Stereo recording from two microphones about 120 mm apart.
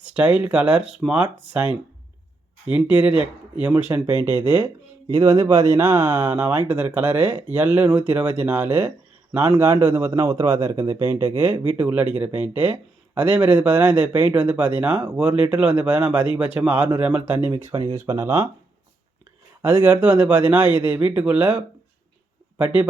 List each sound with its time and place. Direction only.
0.0 s a man's voice: 10° right (ahead or behind)
5.1 s a man's voice: 25° right (ahead or behind)
17.9 s speech: 25° right (ahead or behind)
19.6 s a man's voice: 15° right (ahead or behind)